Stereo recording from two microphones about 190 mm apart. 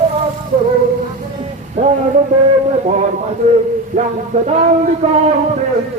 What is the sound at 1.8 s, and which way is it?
Speech, 35° right (ahead or behind).